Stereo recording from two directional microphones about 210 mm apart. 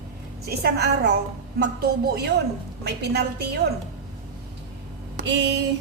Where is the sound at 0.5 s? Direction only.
50° right (ahead or behind).